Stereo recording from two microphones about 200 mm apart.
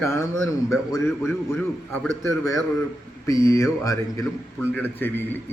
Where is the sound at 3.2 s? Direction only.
15° left (ahead or behind).